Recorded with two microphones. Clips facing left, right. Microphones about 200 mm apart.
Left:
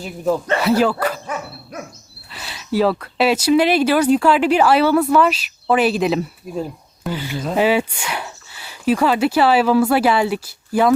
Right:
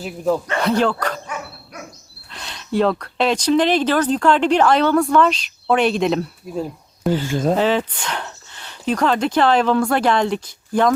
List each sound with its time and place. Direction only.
0.6 s speech: 5° left (ahead or behind)
2.3 s speech: 5° left (ahead or behind)
7.3 s speech: 50° right (ahead or behind)
7.5 s a sound: 10° left (ahead or behind)
8.9 s speech: 5° left (ahead or behind)